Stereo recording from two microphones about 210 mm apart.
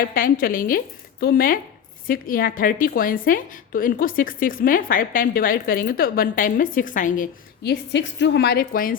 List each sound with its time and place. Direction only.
0.0 s a woman's voice: 45° left (ahead or behind)
7.6 s a woman's voice: 55° left (ahead or behind)